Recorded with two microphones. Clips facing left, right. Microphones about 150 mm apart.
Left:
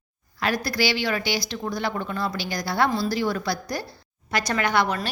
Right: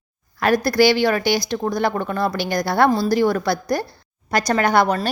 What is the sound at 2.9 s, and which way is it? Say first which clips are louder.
A woman's voice: right 7 dB; 40° right (ahead or behind).